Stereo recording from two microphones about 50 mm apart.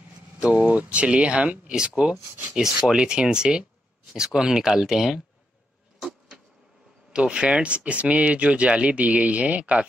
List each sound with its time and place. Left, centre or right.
0.4 s speech: right
2.6 s speech: centre
5.9 s a sound: centre
7.1 s speech: right